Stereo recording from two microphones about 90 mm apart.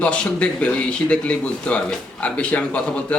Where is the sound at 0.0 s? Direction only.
15° left (ahead or behind).